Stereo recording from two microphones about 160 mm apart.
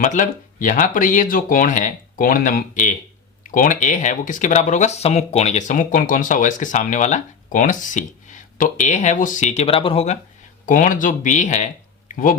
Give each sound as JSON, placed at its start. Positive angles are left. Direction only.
{"t": 0.0, "sound": "speech", "side_deg": 50}
{"t": 10.7, "sound": "speech", "side_deg": 55}